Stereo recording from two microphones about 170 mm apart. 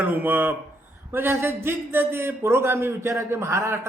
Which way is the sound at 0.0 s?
10° right (ahead or behind).